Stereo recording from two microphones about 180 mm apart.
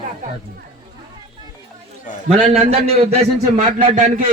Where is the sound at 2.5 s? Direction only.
35° right (ahead or behind).